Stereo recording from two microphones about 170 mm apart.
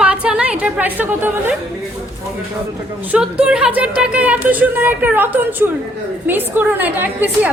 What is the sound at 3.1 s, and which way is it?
A woman's voice, 5° right (ahead or behind).